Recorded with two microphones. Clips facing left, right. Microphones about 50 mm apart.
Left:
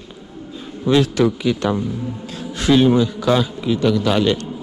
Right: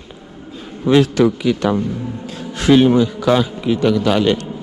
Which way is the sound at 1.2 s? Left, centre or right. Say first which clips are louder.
Right 2 dB; right.